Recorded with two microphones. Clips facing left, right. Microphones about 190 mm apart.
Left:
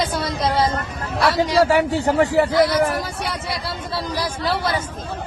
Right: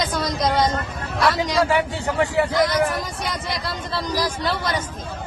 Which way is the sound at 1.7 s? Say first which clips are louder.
Left 4 dB; 40° left (ahead or behind).